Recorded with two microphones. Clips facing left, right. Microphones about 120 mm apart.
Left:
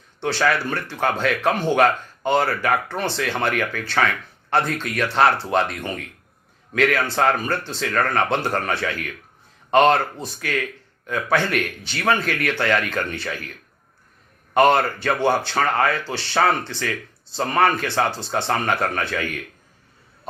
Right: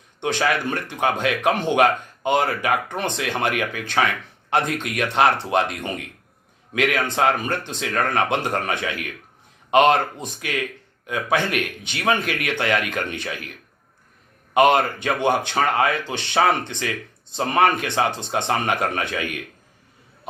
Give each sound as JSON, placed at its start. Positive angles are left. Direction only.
{"t": 0.2, "sound": "speech", "side_deg": -15}